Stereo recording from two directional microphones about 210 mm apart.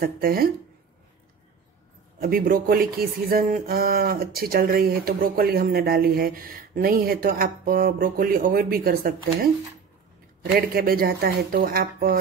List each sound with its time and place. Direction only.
0.0 s speech: 45° right (ahead or behind)
2.1 s speech: 45° right (ahead or behind)